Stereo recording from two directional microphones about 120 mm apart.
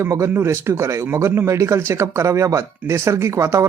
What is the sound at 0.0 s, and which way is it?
Speech, 25° right (ahead or behind).